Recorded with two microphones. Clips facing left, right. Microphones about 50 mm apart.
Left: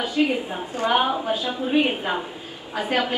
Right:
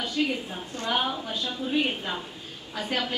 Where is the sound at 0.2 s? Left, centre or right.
Left.